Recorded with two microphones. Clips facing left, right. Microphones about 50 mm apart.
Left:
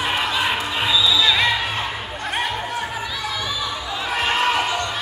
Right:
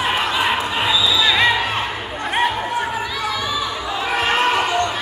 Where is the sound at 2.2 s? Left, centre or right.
Centre.